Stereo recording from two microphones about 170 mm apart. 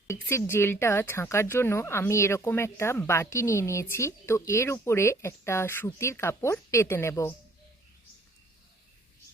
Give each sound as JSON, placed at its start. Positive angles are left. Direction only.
{"t": 0.1, "sound": "speech", "side_deg": 15}